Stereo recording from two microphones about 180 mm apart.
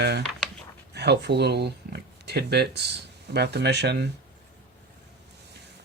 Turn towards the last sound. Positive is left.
turn(degrees=-65)  # may be behind; listen again after turning